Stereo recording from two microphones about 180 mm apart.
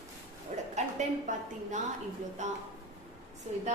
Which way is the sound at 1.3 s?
45° right (ahead or behind).